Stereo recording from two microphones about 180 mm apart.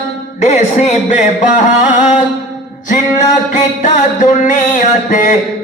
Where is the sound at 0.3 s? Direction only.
40° left (ahead or behind).